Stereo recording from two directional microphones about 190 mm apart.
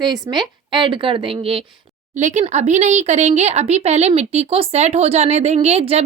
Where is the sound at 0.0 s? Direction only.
20° right (ahead or behind).